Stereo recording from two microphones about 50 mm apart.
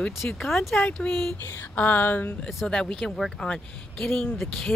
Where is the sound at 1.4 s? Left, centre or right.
Left.